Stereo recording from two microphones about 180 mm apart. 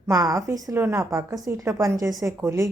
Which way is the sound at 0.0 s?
20° right (ahead or behind).